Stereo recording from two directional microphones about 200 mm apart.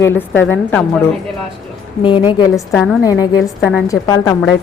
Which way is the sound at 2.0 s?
25° left (ahead or behind).